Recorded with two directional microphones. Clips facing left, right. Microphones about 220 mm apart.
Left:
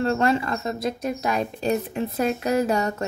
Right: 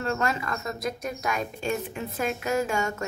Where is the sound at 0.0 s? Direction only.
30° left (ahead or behind).